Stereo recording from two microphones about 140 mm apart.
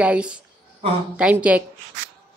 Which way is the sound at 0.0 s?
10° right (ahead or behind).